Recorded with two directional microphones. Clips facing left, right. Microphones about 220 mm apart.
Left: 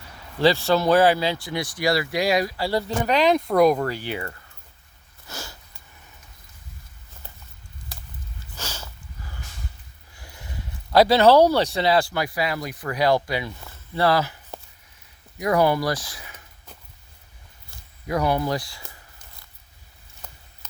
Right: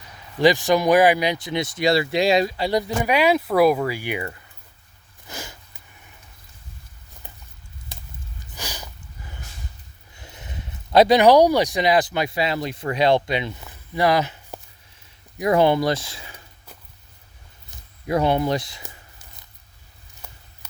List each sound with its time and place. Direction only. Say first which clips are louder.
0.3 s speech: right 2 dB; 15° right (ahead or behind)
5.3 s sniff: right 1 dB; 15° right (ahead or behind)
8.5 s a sound: right 1 dB; 15° right (ahead or behind)
10.2 s speech: right 1 dB; 20° right (ahead or behind)
17.7 s speech: right 4 dB; 25° right (ahead or behind)
20.2 s a sound: right 1 dB; 5° right (ahead or behind)